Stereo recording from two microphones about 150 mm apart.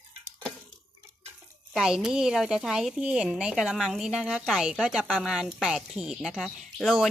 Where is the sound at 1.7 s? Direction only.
5° right (ahead or behind).